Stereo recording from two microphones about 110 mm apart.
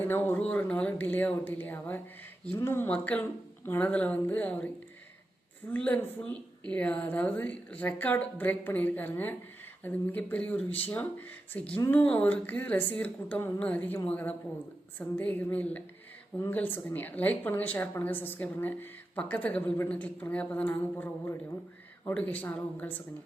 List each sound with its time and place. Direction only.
0.0 s a woman's voice: 20° left (ahead or behind)
5.7 s a woman's voice: 15° left (ahead or behind)